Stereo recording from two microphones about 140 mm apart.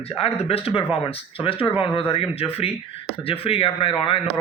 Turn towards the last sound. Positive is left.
turn(degrees=40)  # may be behind; listen again after turning